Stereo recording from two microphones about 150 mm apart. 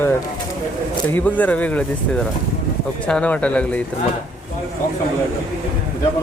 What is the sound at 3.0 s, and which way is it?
Speech, 5° left (ahead or behind).